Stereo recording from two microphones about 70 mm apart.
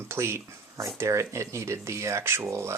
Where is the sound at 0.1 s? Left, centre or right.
Right.